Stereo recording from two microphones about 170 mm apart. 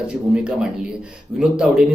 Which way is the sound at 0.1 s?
5° right (ahead or behind).